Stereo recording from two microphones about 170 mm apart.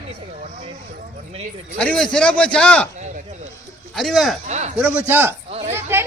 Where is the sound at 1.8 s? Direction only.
5° left (ahead or behind).